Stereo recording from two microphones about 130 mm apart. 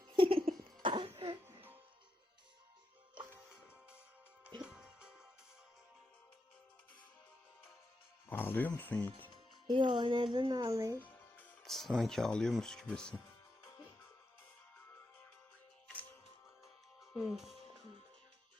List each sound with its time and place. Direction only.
0.2 s a sound: 45° right (ahead or behind)
0.8 s cough: 40° right (ahead or behind)
4.6 s music: 5° right (ahead or behind)
8.3 s speech: 15° left (ahead or behind)
9.6 s speech: 40° right (ahead or behind)
11.0 s music: 10° left (ahead or behind)
11.7 s speech: centre (ahead or behind)
17.0 s music: 5° right (ahead or behind)